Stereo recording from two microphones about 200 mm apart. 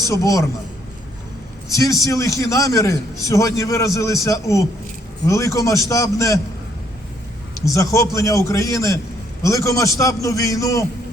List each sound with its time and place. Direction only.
0.1 s a man's voice: 15° left (ahead or behind)
1.7 s a man's voice: 15° left (ahead or behind)
7.7 s a man's voice: 15° left (ahead or behind)